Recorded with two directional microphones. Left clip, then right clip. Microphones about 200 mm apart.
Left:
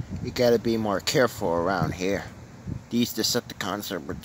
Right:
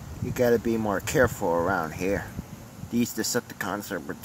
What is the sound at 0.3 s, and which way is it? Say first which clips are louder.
Speech: left 1 dB; 25° left (ahead or behind).